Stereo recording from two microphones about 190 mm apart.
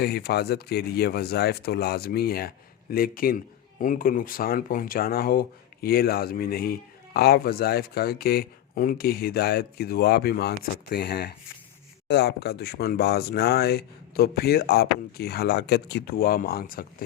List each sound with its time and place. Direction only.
0.0 s speech: 55° left (ahead or behind)